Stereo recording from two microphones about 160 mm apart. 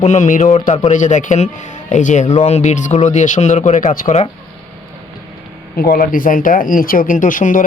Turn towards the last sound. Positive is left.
turn(degrees=55)  # may be behind; listen again after turning